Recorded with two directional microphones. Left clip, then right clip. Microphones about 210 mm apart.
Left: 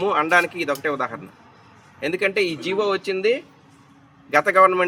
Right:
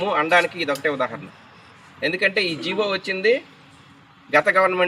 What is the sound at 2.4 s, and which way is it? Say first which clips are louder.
Speech: even; 10° left (ahead or behind).